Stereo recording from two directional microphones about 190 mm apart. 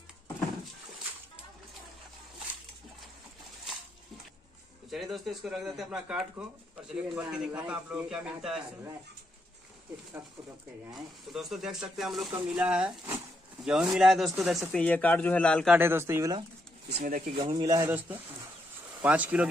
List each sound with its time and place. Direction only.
4.9 s speech: centre (ahead or behind)
11.3 s speech: centre (ahead or behind)
15.7 s speech: 10° right (ahead or behind)
17.0 s speech: 40° right (ahead or behind)
17.5 s speech: 20° right (ahead or behind)